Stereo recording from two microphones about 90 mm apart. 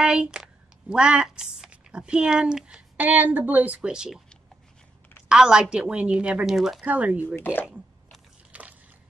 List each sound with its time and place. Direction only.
0.0 s speech: 10° right (ahead or behind)
5.3 s a woman's voice: 10° right (ahead or behind)
6.9 s a woman's voice: 15° right (ahead or behind)
7.3 s speech: 20° left (ahead or behind)
8.5 s biting: 15° right (ahead or behind)